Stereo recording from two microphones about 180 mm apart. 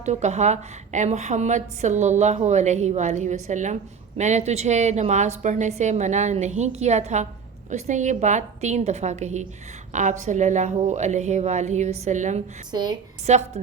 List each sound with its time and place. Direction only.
0.0 s a woman's voice: 40° right (ahead or behind)
12.7 s a woman's voice: 25° right (ahead or behind)
13.2 s a woman's voice: 40° right (ahead or behind)